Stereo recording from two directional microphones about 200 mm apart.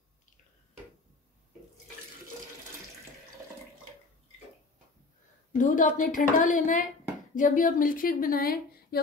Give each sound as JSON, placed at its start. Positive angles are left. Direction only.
{"t": 5.6, "sound": "a woman's voice", "side_deg": 40}